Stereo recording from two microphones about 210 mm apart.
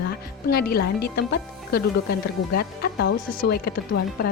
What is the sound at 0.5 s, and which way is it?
Speech, 45° left (ahead or behind).